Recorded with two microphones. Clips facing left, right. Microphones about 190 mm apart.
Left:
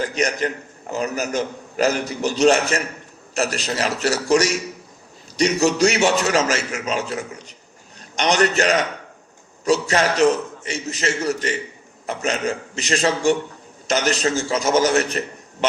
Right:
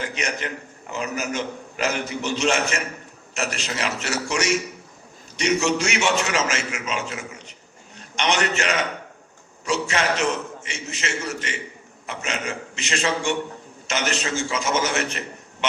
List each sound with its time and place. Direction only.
0.0 s a man's voice: 40° left (ahead or behind)